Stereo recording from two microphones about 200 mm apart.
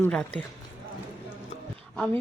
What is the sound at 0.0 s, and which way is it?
Speech, 5° left (ahead or behind).